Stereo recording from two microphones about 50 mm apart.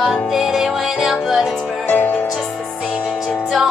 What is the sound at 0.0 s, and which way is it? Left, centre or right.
Music, centre.